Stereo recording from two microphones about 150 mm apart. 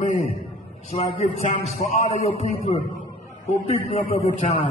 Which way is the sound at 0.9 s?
45° left (ahead or behind).